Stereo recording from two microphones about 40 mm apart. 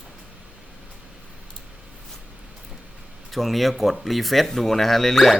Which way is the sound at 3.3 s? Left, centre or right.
Centre.